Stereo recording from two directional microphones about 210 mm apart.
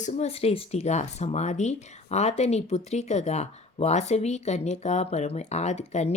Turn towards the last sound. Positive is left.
turn(degrees=30)  # may be behind; listen again after turning